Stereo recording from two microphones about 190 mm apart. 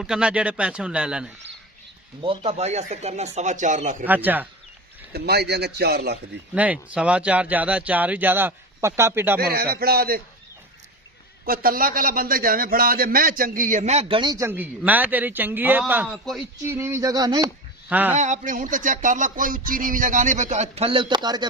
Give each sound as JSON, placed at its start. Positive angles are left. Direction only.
{"t": 0.0, "sound": "speech", "side_deg": -5}
{"t": 2.2, "sound": "speech", "side_deg": -30}
{"t": 4.0, "sound": "speech", "side_deg": -10}
{"t": 5.1, "sound": "a man's voice", "side_deg": -55}
{"t": 6.5, "sound": "speech", "side_deg": -5}
{"t": 9.4, "sound": "a man's voice", "side_deg": -55}
{"t": 11.4, "sound": "a man's voice", "side_deg": -50}
{"t": 16.0, "sound": "speech", "side_deg": 0}
{"t": 16.6, "sound": "speech", "side_deg": -15}
{"t": 17.8, "sound": "a man's voice", "side_deg": -10}
{"t": 18.1, "sound": "speech", "side_deg": -40}